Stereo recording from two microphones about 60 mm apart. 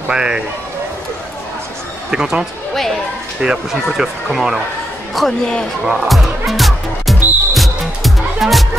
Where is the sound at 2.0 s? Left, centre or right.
Centre.